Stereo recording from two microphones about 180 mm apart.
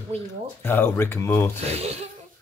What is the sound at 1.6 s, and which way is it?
Speech, 35° right (ahead or behind).